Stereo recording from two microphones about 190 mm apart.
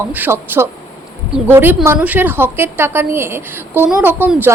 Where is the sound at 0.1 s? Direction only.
10° right (ahead or behind).